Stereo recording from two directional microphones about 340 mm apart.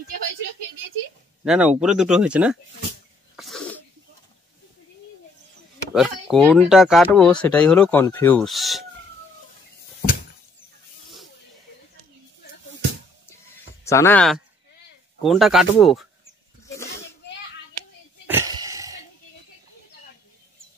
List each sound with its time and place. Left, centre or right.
1.4 s speech: centre
3.3 s sneeze: centre
5.9 s speech: centre
13.8 s speech: centre
16.6 s a sound: centre
16.9 s children playing: left
18.2 s wheeze: centre